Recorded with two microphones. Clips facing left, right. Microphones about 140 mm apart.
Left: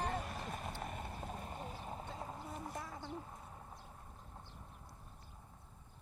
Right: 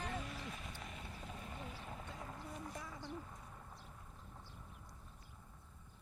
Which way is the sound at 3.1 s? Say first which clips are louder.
Left 2 dB; 25° left (ahead or behind).